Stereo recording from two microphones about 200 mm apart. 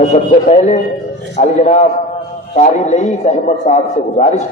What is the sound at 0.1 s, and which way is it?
A man's voice, 35° left (ahead or behind).